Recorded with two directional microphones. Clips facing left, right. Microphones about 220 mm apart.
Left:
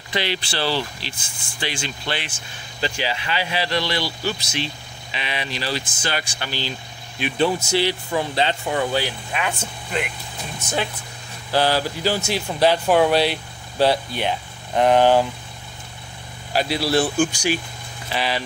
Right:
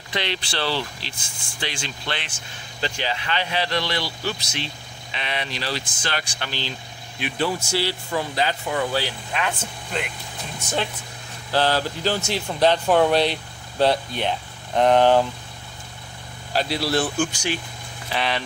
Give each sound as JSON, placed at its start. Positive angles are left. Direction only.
{"t": 0.1, "sound": "speech", "side_deg": 5}
{"t": 7.2, "sound": "speech", "side_deg": 20}
{"t": 9.0, "sound": "speech", "side_deg": 10}
{"t": 11.5, "sound": "speech", "side_deg": 10}
{"t": 16.5, "sound": "speech", "side_deg": 10}